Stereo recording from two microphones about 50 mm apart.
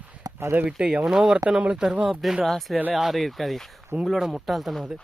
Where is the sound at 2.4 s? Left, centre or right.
Centre.